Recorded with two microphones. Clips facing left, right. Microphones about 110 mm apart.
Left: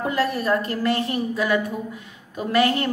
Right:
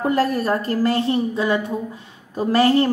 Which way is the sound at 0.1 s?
40° right (ahead or behind).